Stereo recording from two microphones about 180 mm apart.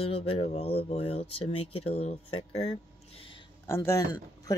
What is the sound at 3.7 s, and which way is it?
Speech, 15° left (ahead or behind).